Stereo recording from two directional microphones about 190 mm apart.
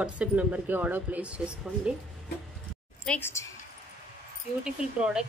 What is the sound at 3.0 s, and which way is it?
Speech, 10° left (ahead or behind).